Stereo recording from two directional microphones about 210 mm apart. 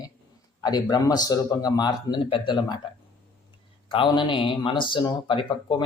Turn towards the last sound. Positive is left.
turn(degrees=25)  # may be behind; listen again after turning